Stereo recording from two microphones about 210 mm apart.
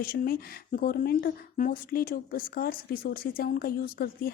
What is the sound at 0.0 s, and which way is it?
Speech, 45° left (ahead or behind).